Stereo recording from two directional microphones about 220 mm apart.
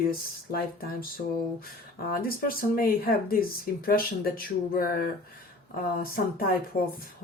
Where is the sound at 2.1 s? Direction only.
40° left (ahead or behind).